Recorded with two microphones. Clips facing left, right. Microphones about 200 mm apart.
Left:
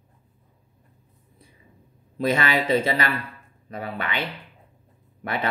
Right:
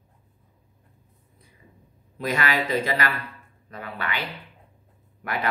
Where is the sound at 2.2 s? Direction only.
30° left (ahead or behind).